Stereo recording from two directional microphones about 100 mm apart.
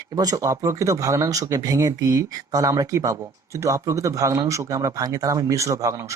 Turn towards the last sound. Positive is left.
turn(degrees=-35)  # may be behind; listen again after turning